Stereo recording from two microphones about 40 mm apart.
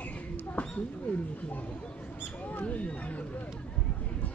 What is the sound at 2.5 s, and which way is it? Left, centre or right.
Mouse, left.